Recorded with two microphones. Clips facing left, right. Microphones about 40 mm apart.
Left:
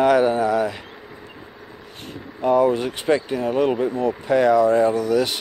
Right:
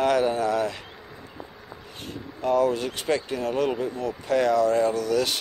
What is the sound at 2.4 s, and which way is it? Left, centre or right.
Speech, left.